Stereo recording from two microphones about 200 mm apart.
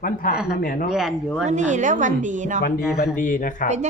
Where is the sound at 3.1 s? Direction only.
40° left (ahead or behind).